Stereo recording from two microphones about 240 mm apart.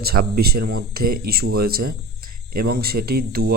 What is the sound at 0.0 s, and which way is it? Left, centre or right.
Speech, right.